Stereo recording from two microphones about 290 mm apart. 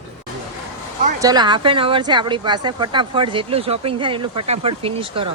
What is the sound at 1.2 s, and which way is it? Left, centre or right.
Speech, centre.